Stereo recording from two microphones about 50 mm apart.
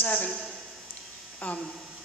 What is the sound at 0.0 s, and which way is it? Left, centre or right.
Speech, left.